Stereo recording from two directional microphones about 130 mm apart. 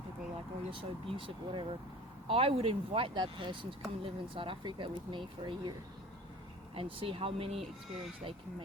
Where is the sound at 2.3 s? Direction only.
45° right (ahead or behind).